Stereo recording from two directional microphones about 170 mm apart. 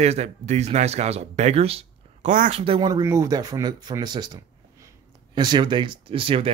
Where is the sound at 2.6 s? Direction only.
35° right (ahead or behind).